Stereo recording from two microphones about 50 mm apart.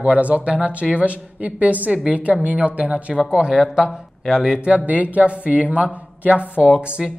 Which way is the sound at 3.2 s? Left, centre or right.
Centre.